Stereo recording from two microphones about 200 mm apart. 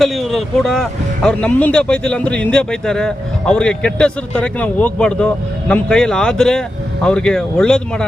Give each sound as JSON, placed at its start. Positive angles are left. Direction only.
{"t": 0.0, "sound": "speech", "side_deg": 0}